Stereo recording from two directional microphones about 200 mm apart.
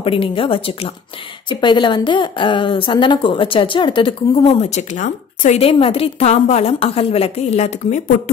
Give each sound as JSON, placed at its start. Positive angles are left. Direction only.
{"t": 0.0, "sound": "a woman's voice", "side_deg": 25}